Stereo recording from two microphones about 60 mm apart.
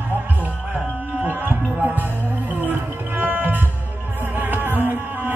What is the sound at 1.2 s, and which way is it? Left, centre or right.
Music, right.